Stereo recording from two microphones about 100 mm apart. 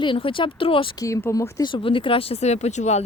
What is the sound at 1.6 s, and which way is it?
A woman's voice, 60° left (ahead or behind).